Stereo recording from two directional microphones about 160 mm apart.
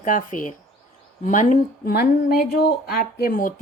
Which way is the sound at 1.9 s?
75° left (ahead or behind).